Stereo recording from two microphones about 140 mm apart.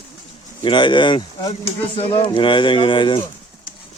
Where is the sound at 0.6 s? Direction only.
35° left (ahead or behind).